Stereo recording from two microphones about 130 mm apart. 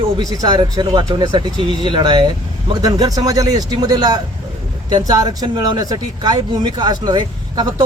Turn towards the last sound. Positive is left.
turn(degrees=-35)  # may be behind; listen again after turning